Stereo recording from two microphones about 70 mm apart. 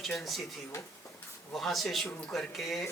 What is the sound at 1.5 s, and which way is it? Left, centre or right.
A man's voice, centre.